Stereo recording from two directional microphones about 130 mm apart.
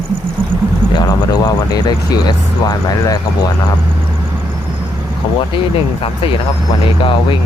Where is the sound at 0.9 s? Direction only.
30° left (ahead or behind).